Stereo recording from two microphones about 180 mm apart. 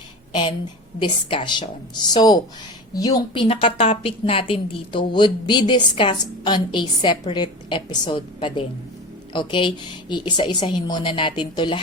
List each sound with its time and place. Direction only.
0.9 s a woman's voice: 25° left (ahead or behind)